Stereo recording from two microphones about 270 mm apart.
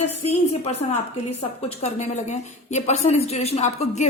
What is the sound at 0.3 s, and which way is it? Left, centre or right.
A woman's voice, left.